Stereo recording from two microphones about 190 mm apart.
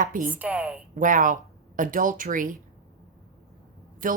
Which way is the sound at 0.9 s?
45° right (ahead or behind).